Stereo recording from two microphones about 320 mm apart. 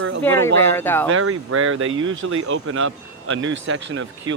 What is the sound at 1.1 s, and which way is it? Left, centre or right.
Speech, right.